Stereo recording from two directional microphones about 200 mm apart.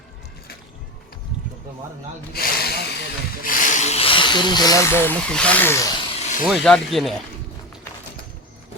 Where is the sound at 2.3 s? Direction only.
50° left (ahead or behind).